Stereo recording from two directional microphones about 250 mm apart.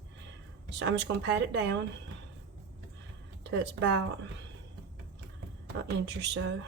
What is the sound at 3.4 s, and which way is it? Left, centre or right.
Speech, right.